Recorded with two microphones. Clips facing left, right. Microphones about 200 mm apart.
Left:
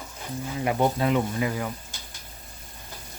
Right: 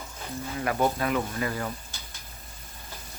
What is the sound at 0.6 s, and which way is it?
Speech, 20° left (ahead or behind).